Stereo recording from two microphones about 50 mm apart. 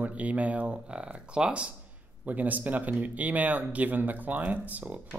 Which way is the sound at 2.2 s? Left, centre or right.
Right.